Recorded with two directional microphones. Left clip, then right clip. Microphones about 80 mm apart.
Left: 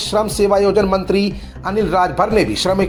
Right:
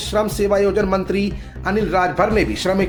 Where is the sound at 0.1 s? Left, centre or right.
Left.